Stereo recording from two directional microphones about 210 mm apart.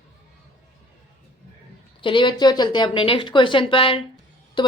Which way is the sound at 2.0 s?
20° left (ahead or behind).